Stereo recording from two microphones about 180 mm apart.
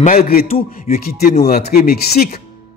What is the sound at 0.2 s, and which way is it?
A man's voice, 55° left (ahead or behind).